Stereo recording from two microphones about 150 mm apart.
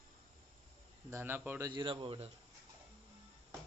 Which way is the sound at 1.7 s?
35° right (ahead or behind).